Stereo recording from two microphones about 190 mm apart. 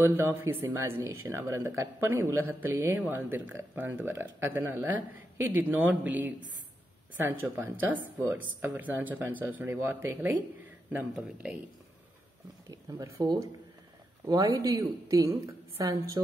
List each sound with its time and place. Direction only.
0.0 s speech: 10° right (ahead or behind)
12.6 s speech: 20° right (ahead or behind)